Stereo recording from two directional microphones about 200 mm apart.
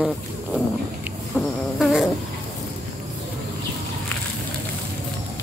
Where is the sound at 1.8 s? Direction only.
Centre (ahead or behind).